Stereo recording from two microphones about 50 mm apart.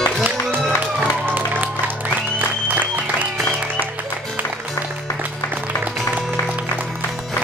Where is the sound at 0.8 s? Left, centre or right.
Right.